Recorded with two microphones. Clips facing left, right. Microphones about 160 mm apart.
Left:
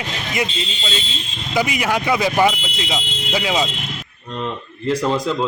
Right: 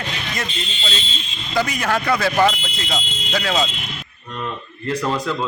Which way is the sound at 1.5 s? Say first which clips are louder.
Left 1 dB; 10° left (ahead or behind).